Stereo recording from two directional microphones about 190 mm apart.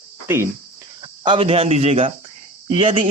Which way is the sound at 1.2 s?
30° right (ahead or behind).